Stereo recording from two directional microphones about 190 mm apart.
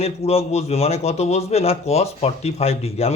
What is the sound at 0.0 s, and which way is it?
A man's voice, 30° left (ahead or behind).